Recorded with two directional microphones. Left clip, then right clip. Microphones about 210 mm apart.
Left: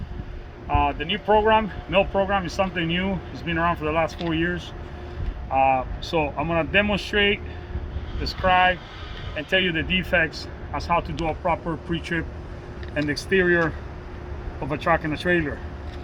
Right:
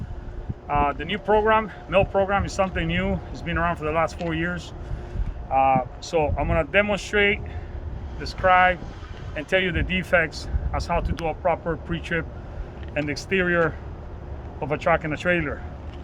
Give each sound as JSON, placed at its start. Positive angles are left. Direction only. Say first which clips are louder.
{"t": 0.7, "sound": "speech", "louder": "even", "side_deg": -10}
{"t": 8.4, "sound": "speech", "louder": "right 1 dB", "side_deg": -10}
{"t": 13.1, "sound": "speech", "louder": "left 3 dB", "side_deg": -20}